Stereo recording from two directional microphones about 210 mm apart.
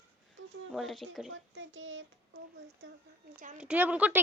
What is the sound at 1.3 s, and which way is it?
Child singing, 65° right (ahead or behind).